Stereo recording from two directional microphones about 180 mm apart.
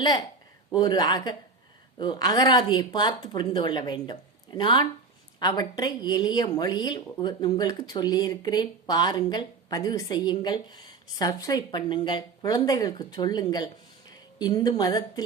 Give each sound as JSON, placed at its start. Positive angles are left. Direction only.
{"t": 0.7, "sound": "speech", "side_deg": 25}